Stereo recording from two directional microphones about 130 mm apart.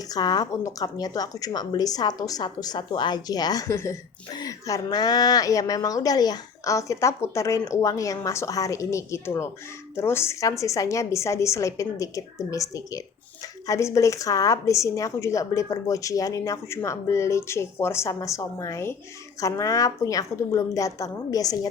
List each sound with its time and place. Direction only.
0.1 s a woman's voice: 30° left (ahead or behind)